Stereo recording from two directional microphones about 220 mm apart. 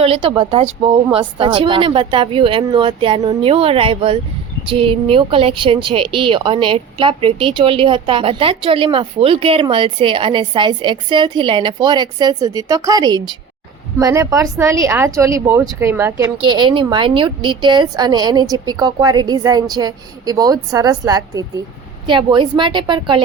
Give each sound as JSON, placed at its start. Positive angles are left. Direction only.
{"t": 0.0, "sound": "a woman's voice", "side_deg": -25}